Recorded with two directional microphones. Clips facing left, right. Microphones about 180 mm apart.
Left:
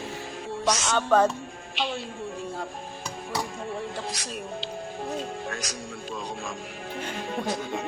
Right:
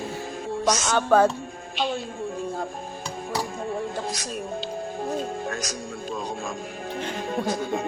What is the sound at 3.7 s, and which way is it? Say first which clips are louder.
Music: right 4 dB; 45° right (ahead or behind).